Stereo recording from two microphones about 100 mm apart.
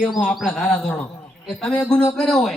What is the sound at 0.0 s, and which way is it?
A man's voice, 5° right (ahead or behind).